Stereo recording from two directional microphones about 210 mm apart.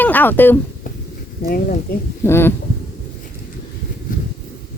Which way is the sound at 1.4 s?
45° left (ahead or behind).